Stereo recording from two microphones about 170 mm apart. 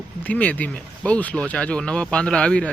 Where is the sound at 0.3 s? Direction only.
10° left (ahead or behind).